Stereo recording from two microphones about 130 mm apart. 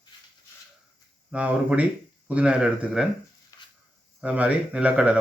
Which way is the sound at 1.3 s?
10° right (ahead or behind).